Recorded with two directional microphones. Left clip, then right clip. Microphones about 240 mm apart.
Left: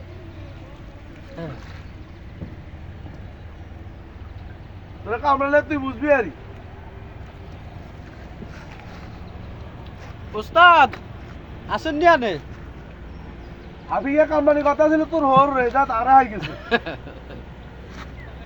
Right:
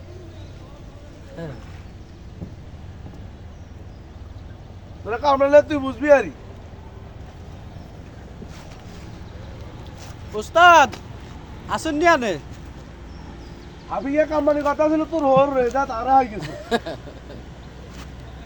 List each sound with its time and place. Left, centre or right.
5.0 s a man's voice: right
10.3 s speech: centre
14.2 s speech: centre
14.8 s speech: centre
16.4 s speech: centre